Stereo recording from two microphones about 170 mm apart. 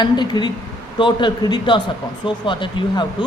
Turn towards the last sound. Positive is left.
turn(degrees=30)  # may be behind; listen again after turning